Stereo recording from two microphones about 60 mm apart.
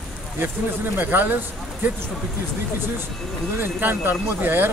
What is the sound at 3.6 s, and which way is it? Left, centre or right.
Speech, right.